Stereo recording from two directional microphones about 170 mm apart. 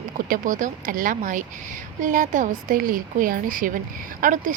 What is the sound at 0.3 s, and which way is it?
Speech, 50° right (ahead or behind).